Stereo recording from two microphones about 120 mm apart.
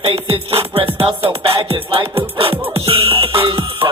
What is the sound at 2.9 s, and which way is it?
Music, 50° right (ahead or behind).